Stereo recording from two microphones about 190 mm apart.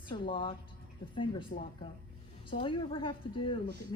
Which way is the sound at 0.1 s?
25° left (ahead or behind).